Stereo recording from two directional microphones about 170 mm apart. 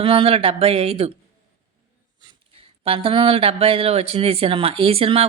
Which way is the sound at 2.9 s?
30° right (ahead or behind).